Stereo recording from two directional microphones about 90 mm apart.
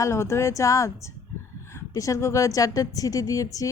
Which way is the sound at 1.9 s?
35° left (ahead or behind).